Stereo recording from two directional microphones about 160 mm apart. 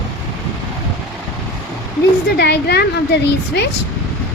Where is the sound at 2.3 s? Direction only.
90° left.